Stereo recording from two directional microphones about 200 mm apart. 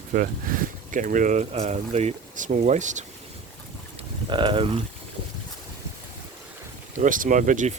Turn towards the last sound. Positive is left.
turn(degrees=-40)  # may be behind; listen again after turning